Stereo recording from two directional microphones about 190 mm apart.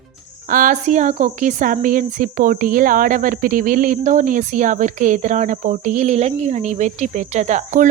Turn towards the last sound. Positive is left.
turn(degrees=-40)  # may be behind; listen again after turning